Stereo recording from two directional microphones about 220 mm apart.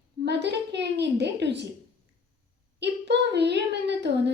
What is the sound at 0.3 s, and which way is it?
A woman's voice, 50° right (ahead or behind).